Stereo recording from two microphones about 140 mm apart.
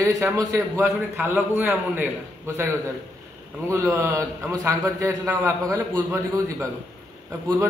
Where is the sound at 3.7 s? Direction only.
20° right (ahead or behind).